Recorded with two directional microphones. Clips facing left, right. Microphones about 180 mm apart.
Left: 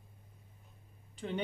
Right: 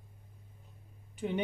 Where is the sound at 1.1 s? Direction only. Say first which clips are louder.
Right 4 dB; 15° right (ahead or behind).